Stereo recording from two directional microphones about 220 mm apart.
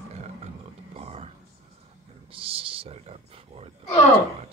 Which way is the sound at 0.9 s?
30° right (ahead or behind).